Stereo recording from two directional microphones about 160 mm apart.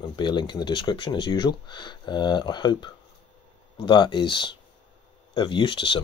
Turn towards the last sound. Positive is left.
turn(degrees=30)  # may be behind; listen again after turning